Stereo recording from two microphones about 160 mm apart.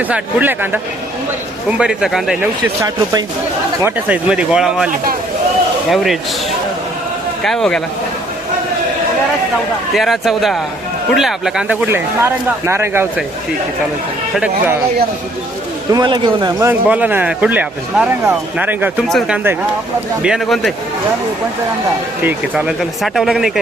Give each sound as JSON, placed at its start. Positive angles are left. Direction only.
{"t": 0.0, "sound": "speech", "side_deg": -10}
{"t": 1.8, "sound": "speech", "side_deg": -5}
{"t": 2.8, "sound": "speech", "side_deg": -25}
{"t": 3.8, "sound": "speech", "side_deg": -10}
{"t": 5.9, "sound": "speech", "side_deg": 0}
{"t": 7.4, "sound": "speech", "side_deg": 0}
{"t": 9.9, "sound": "speech", "side_deg": 0}
{"t": 11.9, "sound": "speech", "side_deg": -15}
{"t": 14.3, "sound": "speech", "side_deg": -10}
{"t": 15.9, "sound": "speech", "side_deg": -25}
{"t": 16.8, "sound": "speech", "side_deg": -10}
{"t": 19.0, "sound": "speech", "side_deg": 0}
{"t": 22.2, "sound": "speech", "side_deg": -10}